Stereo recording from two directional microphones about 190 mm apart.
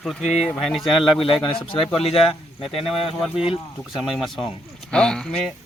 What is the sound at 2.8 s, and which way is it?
Speech, centre (ahead or behind).